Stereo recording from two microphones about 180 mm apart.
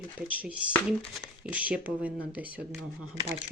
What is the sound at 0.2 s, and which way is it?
Speech, 10° right (ahead or behind).